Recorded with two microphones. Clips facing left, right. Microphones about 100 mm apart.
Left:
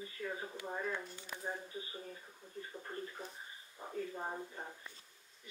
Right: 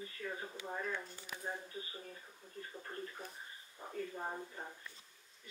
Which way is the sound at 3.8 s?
5° left (ahead or behind).